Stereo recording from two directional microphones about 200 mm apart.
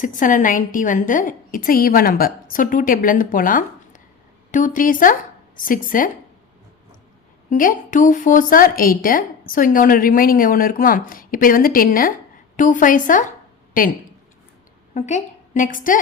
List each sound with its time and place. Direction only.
0.0 s a woman's voice: 40° left (ahead or behind)
7.5 s a woman's voice: 40° left (ahead or behind)
14.9 s a woman's voice: 35° left (ahead or behind)